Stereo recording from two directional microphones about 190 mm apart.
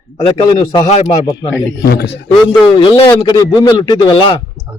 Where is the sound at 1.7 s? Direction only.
65° left (ahead or behind).